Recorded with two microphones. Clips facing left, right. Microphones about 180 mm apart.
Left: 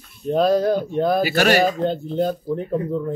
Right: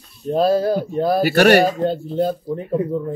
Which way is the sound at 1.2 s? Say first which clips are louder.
Right 5 dB; 60° right (ahead or behind).